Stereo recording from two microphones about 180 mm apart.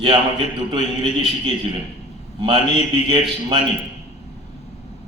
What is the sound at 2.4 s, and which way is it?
A man's voice, 30° right (ahead or behind).